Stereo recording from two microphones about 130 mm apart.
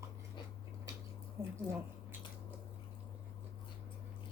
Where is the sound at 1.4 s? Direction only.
25° right (ahead or behind).